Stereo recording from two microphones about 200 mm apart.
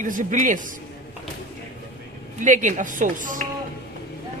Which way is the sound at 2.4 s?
40° right (ahead or behind).